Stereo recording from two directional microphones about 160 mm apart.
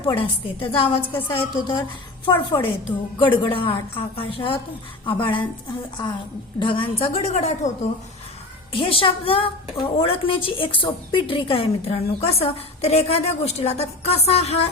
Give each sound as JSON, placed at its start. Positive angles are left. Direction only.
{"t": 0.0, "sound": "a woman's voice", "side_deg": 35}
{"t": 6.6, "sound": "a woman's voice", "side_deg": 30}
{"t": 8.7, "sound": "a woman's voice", "side_deg": 35}